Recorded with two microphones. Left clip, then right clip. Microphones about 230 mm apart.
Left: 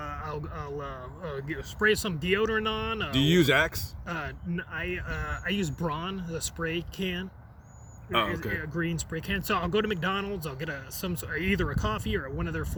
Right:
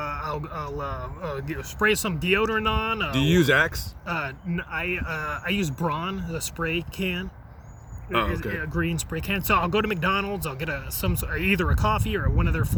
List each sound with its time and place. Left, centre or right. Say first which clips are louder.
0.0 s speech: right 6 dB; centre
3.1 s speech: right 1 dB; left
4.0 s speech: right 7 dB; centre
8.1 s speech: right 2 dB; left
8.5 s speech: right 4 dB; centre